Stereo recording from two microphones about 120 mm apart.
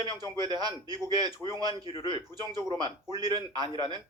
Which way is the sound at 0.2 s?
35° right (ahead or behind).